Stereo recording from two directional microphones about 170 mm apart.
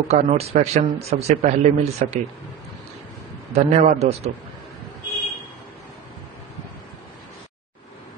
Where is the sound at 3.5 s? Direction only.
40° right (ahead or behind).